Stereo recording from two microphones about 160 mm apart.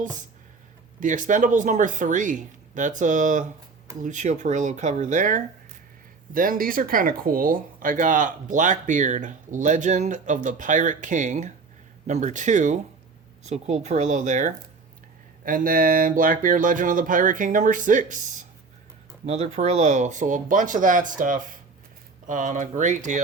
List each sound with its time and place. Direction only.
0.0 s speech: 50° right (ahead or behind)